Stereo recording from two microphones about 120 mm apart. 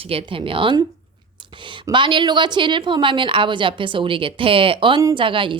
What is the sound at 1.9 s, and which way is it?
A woman's voice, 40° right (ahead or behind).